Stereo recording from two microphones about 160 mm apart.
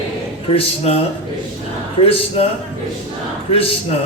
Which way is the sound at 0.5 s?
35° left (ahead or behind).